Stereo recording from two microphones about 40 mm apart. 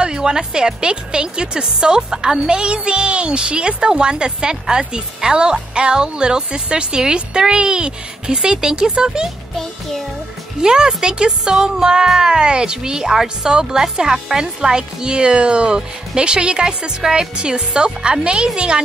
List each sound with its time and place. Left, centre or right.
0.0 s speech: centre
9.6 s music: centre
10.6 s speech: centre